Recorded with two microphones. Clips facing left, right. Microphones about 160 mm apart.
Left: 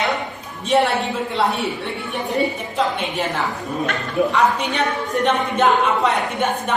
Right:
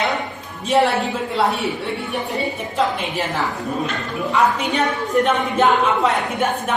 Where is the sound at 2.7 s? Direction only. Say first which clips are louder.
Right 2 dB; 5° right (ahead or behind).